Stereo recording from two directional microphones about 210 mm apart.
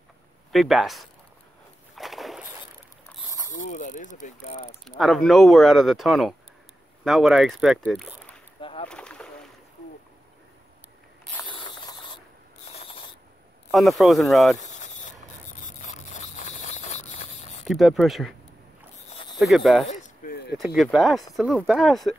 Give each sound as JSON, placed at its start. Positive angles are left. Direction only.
{"t": 0.5, "sound": "speech", "side_deg": 0}
{"t": 2.0, "sound": "a sound", "side_deg": 0}
{"t": 3.6, "sound": "speech", "side_deg": 35}
{"t": 4.8, "sound": "speech", "side_deg": 0}
{"t": 8.5, "sound": "rowboat", "side_deg": 25}
{"t": 8.8, "sound": "boat", "side_deg": 5}
{"t": 11.4, "sound": "a sound", "side_deg": 20}
{"t": 12.7, "sound": "pulleys", "side_deg": 30}
{"t": 13.7, "sound": "speech", "side_deg": 0}
{"t": 14.6, "sound": "a sound", "side_deg": 35}
{"t": 17.6, "sound": "speech", "side_deg": 0}
{"t": 19.3, "sound": "speech", "side_deg": 0}
{"t": 19.9, "sound": "a sound", "side_deg": 35}
{"t": 20.5, "sound": "speech", "side_deg": 0}